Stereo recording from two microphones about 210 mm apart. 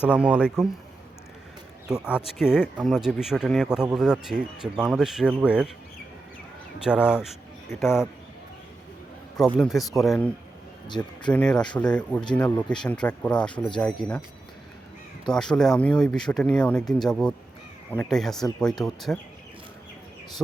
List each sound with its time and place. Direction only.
0.0 s speech: 5° right (ahead or behind)
1.9 s speech: 5° right (ahead or behind)
6.8 s speech: 5° right (ahead or behind)
9.6 s speech: centre (ahead or behind)
10.8 s speech: 20° left (ahead or behind)
11.3 s speech: 5° left (ahead or behind)
15.3 s speech: 5° left (ahead or behind)